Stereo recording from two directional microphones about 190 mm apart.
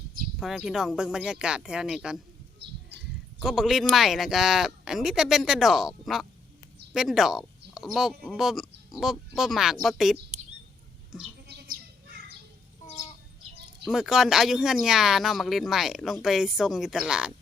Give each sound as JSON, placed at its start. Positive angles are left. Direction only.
{"t": 0.3, "sound": "speech", "side_deg": 0}
{"t": 3.4, "sound": "speech", "side_deg": 0}
{"t": 11.4, "sound": "goat", "side_deg": -60}
{"t": 13.8, "sound": "speech", "side_deg": 0}